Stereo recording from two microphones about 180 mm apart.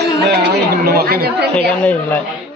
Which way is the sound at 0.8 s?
60° right (ahead or behind).